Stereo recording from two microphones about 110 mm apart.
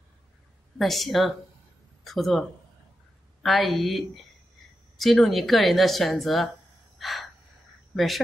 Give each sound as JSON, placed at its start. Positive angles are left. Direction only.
{"t": 0.7, "sound": "speech", "side_deg": 0}
{"t": 3.4, "sound": "speech", "side_deg": 0}
{"t": 7.0, "sound": "gasp", "side_deg": 0}
{"t": 7.9, "sound": "speech", "side_deg": 0}